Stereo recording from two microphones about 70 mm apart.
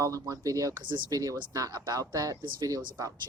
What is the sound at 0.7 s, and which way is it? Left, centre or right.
Speech, right.